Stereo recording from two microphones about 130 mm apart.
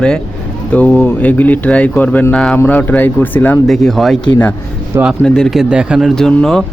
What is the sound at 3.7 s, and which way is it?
Speech, centre (ahead or behind).